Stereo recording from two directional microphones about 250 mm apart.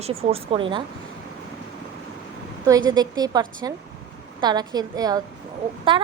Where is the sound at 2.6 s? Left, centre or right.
Centre.